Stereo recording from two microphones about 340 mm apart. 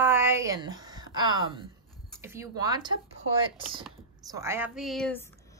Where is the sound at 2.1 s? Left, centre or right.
Centre.